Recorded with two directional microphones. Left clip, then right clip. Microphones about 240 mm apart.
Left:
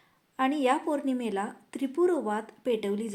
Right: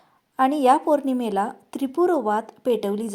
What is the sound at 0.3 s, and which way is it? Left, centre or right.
A woman's voice, right.